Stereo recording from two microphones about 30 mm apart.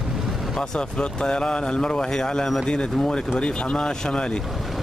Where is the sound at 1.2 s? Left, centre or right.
Left.